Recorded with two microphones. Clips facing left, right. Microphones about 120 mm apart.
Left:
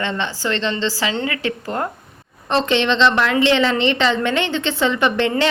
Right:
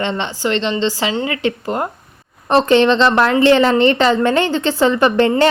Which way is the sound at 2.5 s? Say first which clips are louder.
Right 6 dB; 40° right (ahead or behind).